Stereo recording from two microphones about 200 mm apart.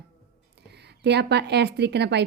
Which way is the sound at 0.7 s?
55° right (ahead or behind).